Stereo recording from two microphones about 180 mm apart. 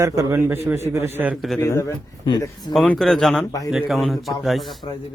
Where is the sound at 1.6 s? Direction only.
15° left (ahead or behind).